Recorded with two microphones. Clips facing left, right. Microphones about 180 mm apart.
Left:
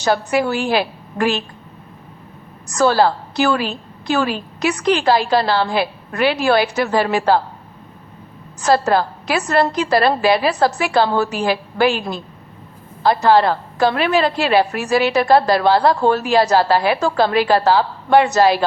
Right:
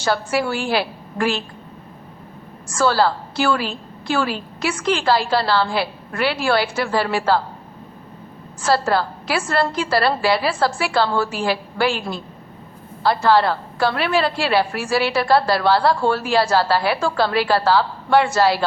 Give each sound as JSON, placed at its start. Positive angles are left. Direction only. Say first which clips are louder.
{"t": 0.0, "sound": "a woman's voice", "louder": "left 3 dB", "side_deg": 20}
{"t": 2.6, "sound": "a woman's voice", "louder": "left 3 dB", "side_deg": 20}
{"t": 8.9, "sound": "a woman's voice", "louder": "left 3 dB", "side_deg": 20}